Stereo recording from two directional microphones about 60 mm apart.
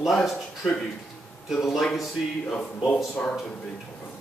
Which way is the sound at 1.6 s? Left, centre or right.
Centre.